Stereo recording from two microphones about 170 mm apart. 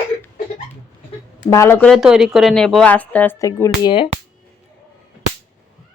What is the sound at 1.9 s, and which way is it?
A woman's voice, 5° right (ahead or behind).